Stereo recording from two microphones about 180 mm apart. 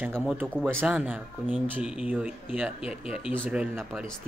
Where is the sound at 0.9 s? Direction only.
5° right (ahead or behind).